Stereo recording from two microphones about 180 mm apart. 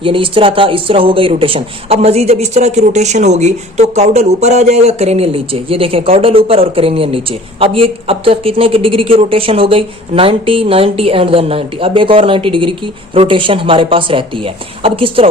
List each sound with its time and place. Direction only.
0.0 s speech: 30° right (ahead or behind)